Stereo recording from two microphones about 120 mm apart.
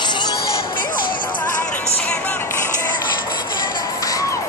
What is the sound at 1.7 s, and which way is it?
Music, 10° left (ahead or behind).